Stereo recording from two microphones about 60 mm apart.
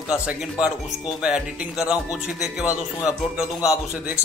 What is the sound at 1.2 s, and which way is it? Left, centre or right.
A man's voice, centre.